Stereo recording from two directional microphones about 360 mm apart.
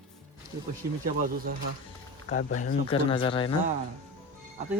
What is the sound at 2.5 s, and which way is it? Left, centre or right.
Speech, centre.